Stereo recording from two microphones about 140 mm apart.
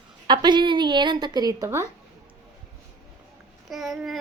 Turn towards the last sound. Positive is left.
turn(degrees=0)  # may be behind; listen again after turning